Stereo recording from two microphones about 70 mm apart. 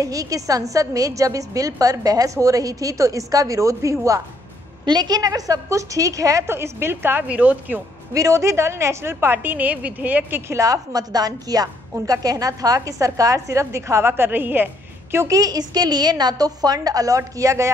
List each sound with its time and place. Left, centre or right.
0.0 s a woman's voice: right
4.8 s a woman's voice: right
6.4 s a woman's voice: right
8.1 s a woman's voice: right
9.1 s a woman's voice: right
10.5 s a woman's voice: right
15.3 s a woman's voice: right